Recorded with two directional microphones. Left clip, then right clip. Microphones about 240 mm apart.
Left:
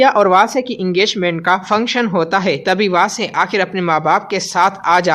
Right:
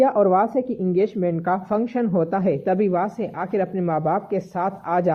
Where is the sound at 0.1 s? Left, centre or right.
Centre.